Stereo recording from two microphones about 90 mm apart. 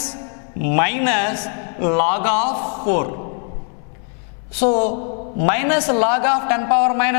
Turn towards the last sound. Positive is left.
turn(degrees=10)  # may be behind; listen again after turning